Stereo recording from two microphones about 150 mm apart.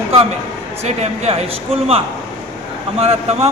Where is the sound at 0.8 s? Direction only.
45° right (ahead or behind).